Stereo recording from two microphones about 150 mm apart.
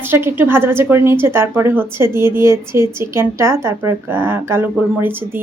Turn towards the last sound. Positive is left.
turn(degrees=-15)  # may be behind; listen again after turning